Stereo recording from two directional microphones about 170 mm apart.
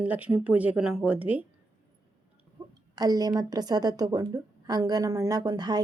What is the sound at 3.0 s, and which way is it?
A woman's voice, 20° right (ahead or behind).